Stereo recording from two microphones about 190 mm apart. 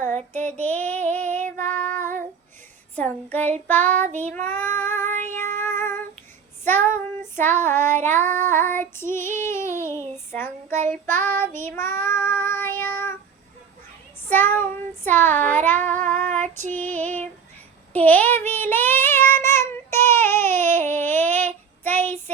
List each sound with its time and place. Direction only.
0.0 s child singing: 10° left (ahead or behind)
1.1 s female singing: 10° left (ahead or behind)
1.4 s female singing: 40° right (ahead or behind)
1.6 s child singing: 10° left (ahead or behind)
2.0 s female singing: 40° right (ahead or behind)
2.9 s child singing: 10° left (ahead or behind)
5.2 s child singing: 40° right (ahead or behind)
5.5 s female singing: 10° left (ahead or behind)
6.7 s child singing: 10° left (ahead or behind)
14.3 s child singing: 10° left (ahead or behind)
16.7 s female singing: 10° left (ahead or behind)
17.9 s child singing: 10° left (ahead or behind)